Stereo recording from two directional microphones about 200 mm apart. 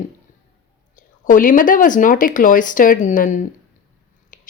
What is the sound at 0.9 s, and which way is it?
Speech, 40° left (ahead or behind).